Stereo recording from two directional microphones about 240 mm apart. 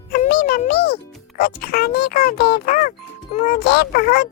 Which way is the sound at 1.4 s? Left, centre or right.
Left.